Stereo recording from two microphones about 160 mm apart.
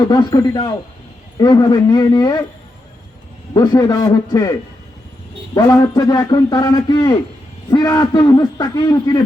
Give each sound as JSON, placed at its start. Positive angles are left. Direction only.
{"t": 0.0, "sound": "a man's voice", "side_deg": 25}
{"t": 3.5, "sound": "a man's voice", "side_deg": 25}
{"t": 5.5, "sound": "a man's voice", "side_deg": 25}